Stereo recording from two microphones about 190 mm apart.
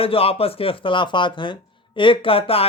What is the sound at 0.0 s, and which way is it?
A man's voice, 30° left (ahead or behind).